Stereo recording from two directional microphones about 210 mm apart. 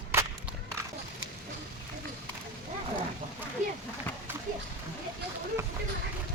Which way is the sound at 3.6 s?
35° right (ahead or behind).